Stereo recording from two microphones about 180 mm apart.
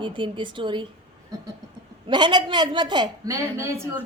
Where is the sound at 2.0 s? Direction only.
25° right (ahead or behind).